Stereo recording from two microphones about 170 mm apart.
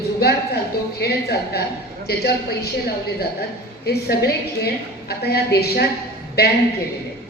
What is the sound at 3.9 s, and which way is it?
A woman's voice, 70° left (ahead or behind).